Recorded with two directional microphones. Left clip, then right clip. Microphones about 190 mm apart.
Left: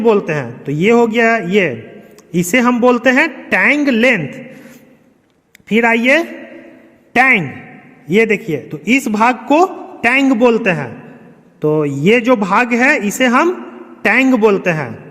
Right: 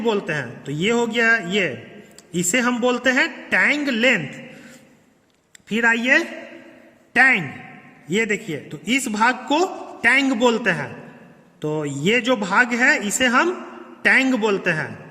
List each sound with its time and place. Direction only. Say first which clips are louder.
0.0 s a man's voice: left 9 dB; 30° left (ahead or behind)